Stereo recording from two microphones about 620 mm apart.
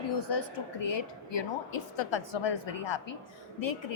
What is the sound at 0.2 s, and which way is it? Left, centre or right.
A woman's voice, left.